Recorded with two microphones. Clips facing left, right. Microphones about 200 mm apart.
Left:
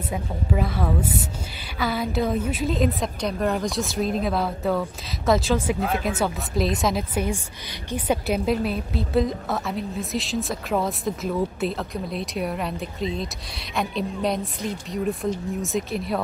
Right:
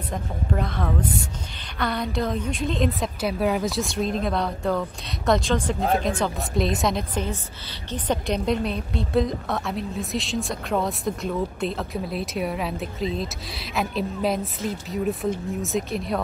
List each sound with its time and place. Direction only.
0.1 s a woman's voice: 5° left (ahead or behind)
5.8 s speech: 35° right (ahead or behind)
6.0 s a woman's voice: 5° left (ahead or behind)